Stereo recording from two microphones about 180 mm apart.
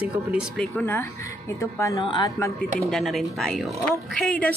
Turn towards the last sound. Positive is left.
turn(degrees=5)  # may be behind; listen again after turning